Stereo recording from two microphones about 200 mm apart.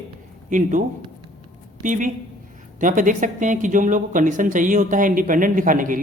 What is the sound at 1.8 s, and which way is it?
A woman's voice, 40° right (ahead or behind).